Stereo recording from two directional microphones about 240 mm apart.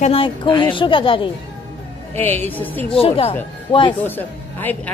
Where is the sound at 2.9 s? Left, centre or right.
Left.